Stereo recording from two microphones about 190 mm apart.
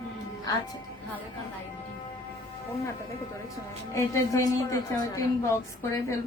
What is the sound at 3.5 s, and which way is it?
Speech, 15° left (ahead or behind).